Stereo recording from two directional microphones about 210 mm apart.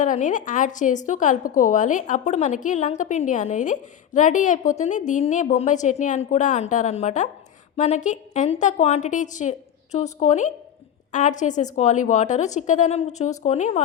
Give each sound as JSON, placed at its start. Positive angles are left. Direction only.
{"t": 0.0, "sound": "a woman's voice", "side_deg": 40}